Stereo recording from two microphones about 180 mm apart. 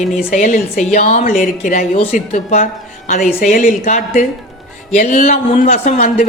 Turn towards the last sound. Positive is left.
turn(degrees=45)  # may be behind; listen again after turning